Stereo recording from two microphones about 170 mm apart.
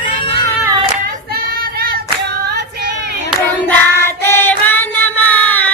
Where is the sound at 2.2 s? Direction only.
80° right.